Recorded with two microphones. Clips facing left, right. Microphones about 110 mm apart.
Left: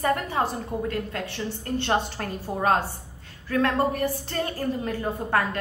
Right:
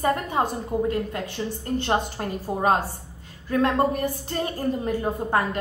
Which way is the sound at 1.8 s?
15° right (ahead or behind).